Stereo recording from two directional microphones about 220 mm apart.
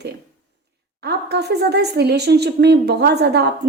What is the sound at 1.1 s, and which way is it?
A woman's voice, 50° right (ahead or behind).